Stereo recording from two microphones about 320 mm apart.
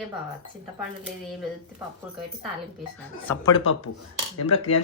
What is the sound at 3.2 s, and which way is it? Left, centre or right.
Speech, centre.